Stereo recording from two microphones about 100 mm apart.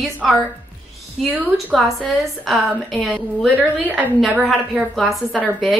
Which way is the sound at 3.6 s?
20° right (ahead or behind).